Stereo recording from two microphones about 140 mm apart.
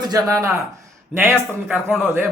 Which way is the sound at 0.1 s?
25° right (ahead or behind).